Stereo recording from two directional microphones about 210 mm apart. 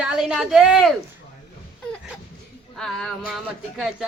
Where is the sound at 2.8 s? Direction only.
Centre (ahead or behind).